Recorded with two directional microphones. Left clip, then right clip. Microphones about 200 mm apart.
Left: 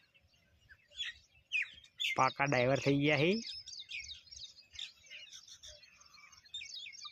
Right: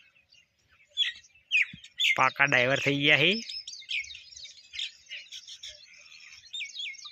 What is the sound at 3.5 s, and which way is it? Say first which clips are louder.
Chirp: right 10 dB; 35° left (ahead or behind).